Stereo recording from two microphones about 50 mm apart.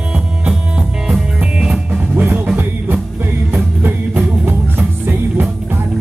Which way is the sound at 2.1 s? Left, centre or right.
Right.